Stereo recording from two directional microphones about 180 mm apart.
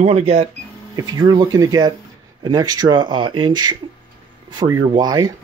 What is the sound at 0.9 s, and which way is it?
Speech, 20° right (ahead or behind).